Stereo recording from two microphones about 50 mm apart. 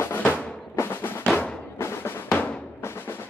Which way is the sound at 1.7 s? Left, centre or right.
Left.